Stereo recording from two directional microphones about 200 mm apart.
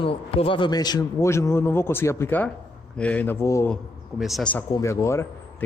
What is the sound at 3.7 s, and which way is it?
Speech, centre (ahead or behind).